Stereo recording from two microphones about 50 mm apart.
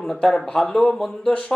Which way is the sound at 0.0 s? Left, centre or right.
Centre.